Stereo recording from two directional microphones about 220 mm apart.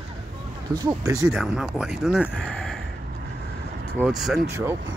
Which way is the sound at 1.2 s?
Centre (ahead or behind).